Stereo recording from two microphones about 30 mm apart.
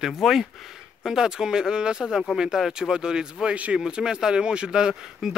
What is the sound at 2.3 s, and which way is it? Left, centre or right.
Speech, centre.